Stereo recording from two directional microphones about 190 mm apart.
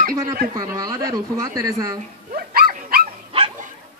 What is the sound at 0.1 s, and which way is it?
Speech, 20° right (ahead or behind).